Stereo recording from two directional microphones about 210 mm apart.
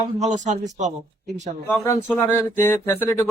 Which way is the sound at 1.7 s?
10° left (ahead or behind).